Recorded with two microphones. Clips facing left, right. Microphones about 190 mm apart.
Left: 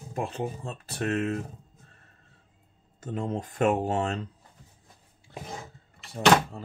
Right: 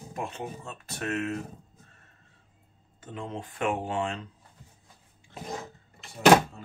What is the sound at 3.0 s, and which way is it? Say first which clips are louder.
Speech: left 6 dB; 40° left (ahead or behind).